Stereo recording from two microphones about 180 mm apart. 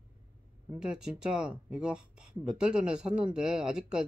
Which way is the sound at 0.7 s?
5° right (ahead or behind).